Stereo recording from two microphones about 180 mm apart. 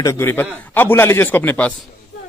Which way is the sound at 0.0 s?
15° left (ahead or behind).